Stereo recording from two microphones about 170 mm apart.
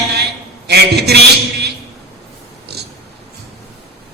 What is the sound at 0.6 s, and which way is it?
A man's voice, 75° right (ahead or behind).